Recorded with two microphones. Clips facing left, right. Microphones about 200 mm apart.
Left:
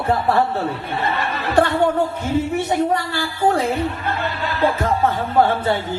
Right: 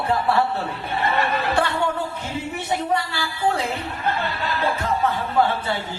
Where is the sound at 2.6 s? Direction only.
45° left (ahead or behind).